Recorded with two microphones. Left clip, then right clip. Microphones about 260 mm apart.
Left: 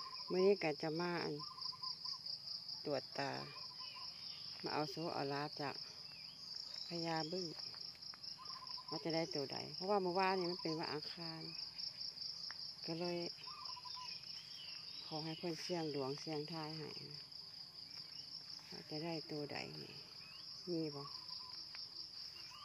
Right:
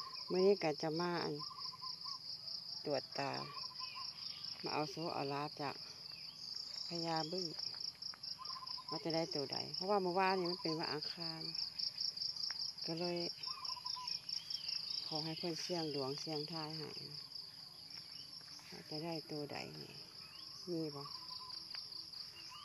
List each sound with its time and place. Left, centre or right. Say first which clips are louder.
0.3 s cricket: right 2 dB; centre
2.8 s cricket: right 2 dB; centre
4.6 s cricket: right 1 dB; centre
6.9 s cricket: right 2 dB; centre
8.9 s cricket: right 1 dB; centre
12.8 s cricket: right 1 dB; centre
15.0 s cricket: right 3 dB; centre
18.9 s cricket: right 1 dB; centre